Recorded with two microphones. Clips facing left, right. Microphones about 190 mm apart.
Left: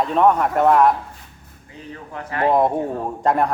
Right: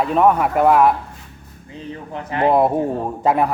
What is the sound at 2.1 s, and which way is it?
Speech, 20° right (ahead or behind).